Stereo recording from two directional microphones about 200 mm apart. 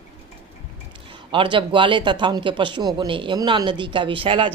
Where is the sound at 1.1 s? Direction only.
25° right (ahead or behind).